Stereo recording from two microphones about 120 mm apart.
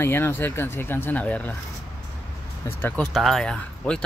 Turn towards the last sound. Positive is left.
turn(degrees=10)  # may be behind; listen again after turning